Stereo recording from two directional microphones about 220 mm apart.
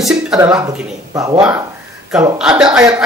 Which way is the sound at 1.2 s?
15° right (ahead or behind).